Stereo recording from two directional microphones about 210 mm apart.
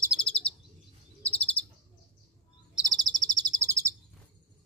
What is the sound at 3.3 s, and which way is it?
Bird, 15° right (ahead or behind).